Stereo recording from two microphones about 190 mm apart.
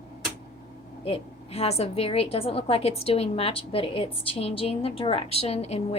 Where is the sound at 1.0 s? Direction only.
30° left (ahead or behind).